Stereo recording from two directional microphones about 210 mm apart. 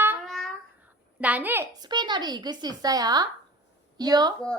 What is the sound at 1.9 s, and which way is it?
Speech, 20° right (ahead or behind).